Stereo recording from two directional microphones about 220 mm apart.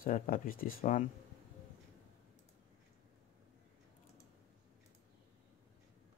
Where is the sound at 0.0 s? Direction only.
40° left (ahead or behind).